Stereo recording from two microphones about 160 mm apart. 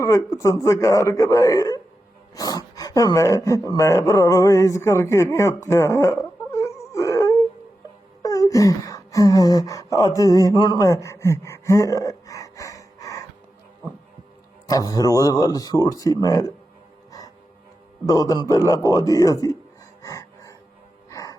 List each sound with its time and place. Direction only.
0.0 s speech: 20° left (ahead or behind)
14.7 s speech: 25° left (ahead or behind)
17.1 s music: 25° left (ahead or behind)
18.0 s speech: 20° left (ahead or behind)
20.0 s a sound: 20° left (ahead or behind)
21.1 s music: 20° left (ahead or behind)